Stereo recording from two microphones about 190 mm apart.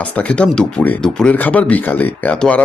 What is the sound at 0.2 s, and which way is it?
Speech, 5° left (ahead or behind).